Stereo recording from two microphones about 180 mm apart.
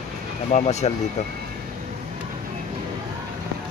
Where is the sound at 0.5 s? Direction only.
40° left (ahead or behind).